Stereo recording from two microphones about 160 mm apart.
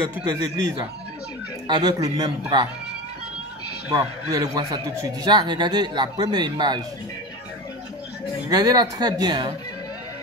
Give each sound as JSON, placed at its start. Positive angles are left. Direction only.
{"t": 0.2, "sound": "a man's voice", "side_deg": -25}
{"t": 3.9, "sound": "a man's voice", "side_deg": -25}
{"t": 8.5, "sound": "a man's voice", "side_deg": -25}